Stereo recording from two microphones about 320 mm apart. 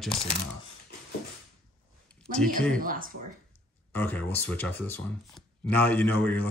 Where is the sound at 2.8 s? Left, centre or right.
Right.